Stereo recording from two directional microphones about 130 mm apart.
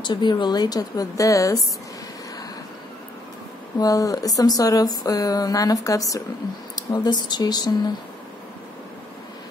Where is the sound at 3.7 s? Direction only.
25° left (ahead or behind).